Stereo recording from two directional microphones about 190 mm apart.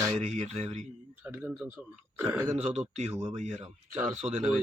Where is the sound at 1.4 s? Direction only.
Centre (ahead or behind).